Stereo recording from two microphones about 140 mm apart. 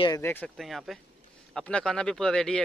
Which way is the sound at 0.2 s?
15° left (ahead or behind).